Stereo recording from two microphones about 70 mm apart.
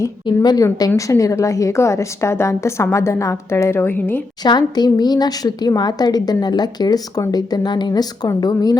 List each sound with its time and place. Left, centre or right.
0.3 s a woman's voice: left
0.6 s a woman's voice: left
4.4 s a woman's voice: left